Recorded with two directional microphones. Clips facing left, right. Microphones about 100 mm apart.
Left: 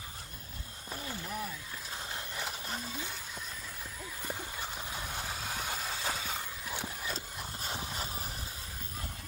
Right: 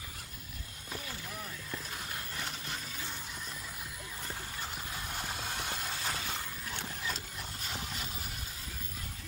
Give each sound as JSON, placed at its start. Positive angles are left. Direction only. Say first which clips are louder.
{"t": 5.4, "sound": "vehicle", "louder": "left 1 dB", "side_deg": 5}